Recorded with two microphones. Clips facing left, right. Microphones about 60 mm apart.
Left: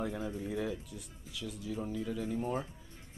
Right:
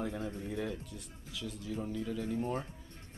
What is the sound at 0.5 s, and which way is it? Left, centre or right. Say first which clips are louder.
Speech: left 1 dB; centre.